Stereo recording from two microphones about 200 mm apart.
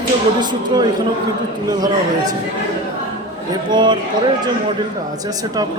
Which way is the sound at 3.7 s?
20° right (ahead or behind).